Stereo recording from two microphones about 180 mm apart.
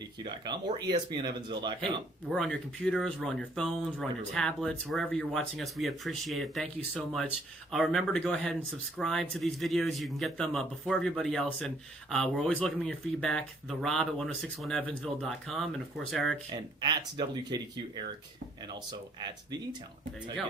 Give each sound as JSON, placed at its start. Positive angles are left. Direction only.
{"t": 0.2, "sound": "speech", "side_deg": -25}
{"t": 2.3, "sound": "speech", "side_deg": 5}
{"t": 16.8, "sound": "speech", "side_deg": -25}